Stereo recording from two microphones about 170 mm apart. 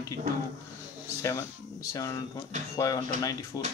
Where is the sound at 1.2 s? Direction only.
15° left (ahead or behind).